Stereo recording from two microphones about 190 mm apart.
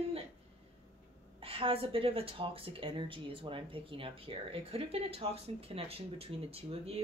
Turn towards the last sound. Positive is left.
turn(degrees=-30)  # may be behind; listen again after turning